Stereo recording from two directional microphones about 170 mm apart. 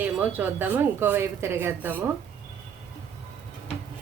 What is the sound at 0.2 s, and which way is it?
A woman's voice, 10° right (ahead or behind).